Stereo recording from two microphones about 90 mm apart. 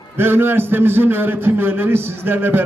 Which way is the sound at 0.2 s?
25° right (ahead or behind).